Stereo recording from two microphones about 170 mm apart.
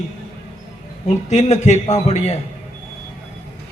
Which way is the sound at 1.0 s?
40° left (ahead or behind).